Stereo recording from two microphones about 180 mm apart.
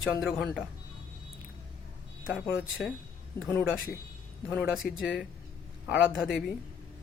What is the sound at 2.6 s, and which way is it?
Speech, 5° right (ahead or behind).